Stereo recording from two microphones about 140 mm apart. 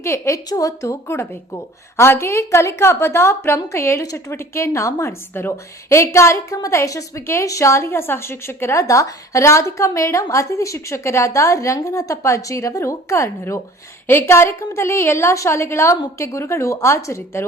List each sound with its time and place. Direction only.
0.0 s a woman's voice: 20° left (ahead or behind)